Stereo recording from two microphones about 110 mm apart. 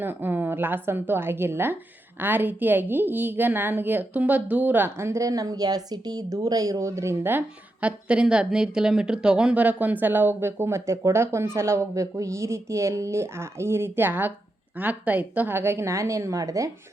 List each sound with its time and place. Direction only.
0.0 s a woman's voice: 20° right (ahead or behind)